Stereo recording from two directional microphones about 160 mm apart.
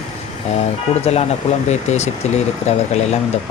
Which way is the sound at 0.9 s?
35° left (ahead or behind).